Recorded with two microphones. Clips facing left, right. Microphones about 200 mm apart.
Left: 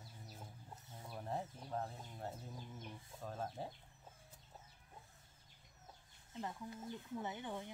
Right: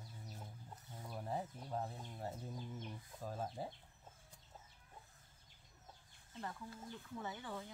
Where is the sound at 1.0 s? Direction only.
Centre (ahead or behind).